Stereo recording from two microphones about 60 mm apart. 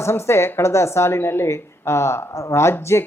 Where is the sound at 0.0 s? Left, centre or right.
Left.